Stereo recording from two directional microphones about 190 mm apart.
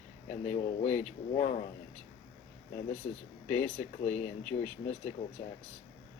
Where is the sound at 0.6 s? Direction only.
30° left (ahead or behind).